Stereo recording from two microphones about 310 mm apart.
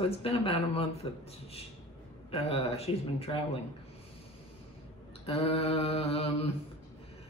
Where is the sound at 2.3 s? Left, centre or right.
Centre.